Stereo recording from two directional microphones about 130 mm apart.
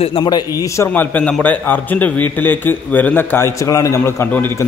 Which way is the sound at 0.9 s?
10° left (ahead or behind).